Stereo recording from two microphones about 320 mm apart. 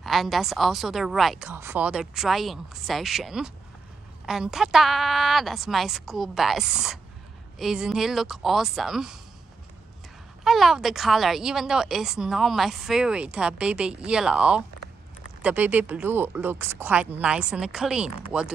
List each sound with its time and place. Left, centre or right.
0.0 s speech: centre
10.4 s speech: centre